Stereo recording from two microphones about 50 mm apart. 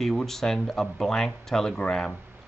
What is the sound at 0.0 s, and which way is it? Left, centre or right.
Speech, centre.